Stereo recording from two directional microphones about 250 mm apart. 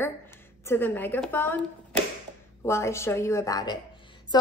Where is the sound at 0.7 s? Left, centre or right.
Centre.